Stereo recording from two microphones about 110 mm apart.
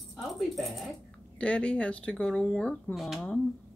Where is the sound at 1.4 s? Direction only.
10° left (ahead or behind).